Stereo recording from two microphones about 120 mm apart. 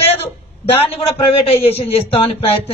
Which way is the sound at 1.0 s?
55° left (ahead or behind).